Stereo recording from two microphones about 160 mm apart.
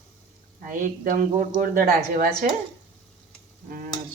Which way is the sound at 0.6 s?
55° right (ahead or behind).